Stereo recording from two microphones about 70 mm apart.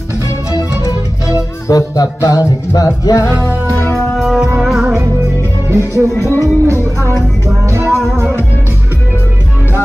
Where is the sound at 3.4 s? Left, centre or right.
Left.